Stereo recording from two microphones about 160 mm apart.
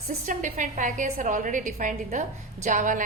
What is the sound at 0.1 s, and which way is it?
A woman's voice, 55° right (ahead or behind).